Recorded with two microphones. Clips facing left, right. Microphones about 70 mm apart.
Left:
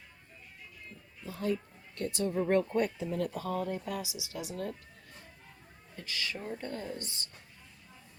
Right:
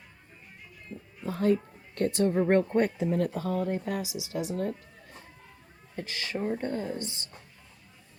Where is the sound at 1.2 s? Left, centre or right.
Right.